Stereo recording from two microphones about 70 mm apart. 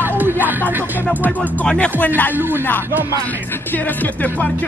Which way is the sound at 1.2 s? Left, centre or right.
Left.